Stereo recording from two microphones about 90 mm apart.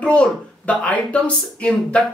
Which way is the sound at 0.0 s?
15° left (ahead or behind).